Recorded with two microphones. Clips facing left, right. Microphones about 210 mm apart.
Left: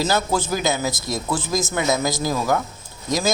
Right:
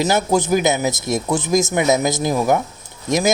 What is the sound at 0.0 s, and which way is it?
Speech, 20° right (ahead or behind).